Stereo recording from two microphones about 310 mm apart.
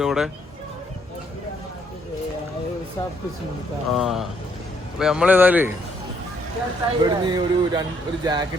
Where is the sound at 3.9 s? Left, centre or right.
Centre.